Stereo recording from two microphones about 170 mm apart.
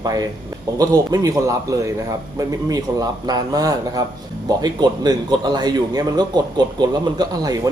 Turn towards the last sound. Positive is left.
turn(degrees=-25)  # may be behind; listen again after turning